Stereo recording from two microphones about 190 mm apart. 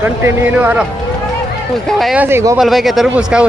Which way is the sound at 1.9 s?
Centre (ahead or behind).